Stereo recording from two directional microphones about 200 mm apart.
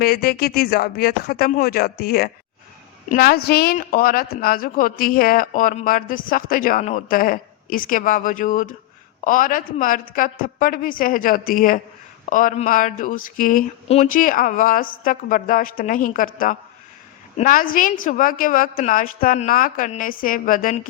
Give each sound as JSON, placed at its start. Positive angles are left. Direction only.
{"t": 0.0, "sound": "speech", "side_deg": 50}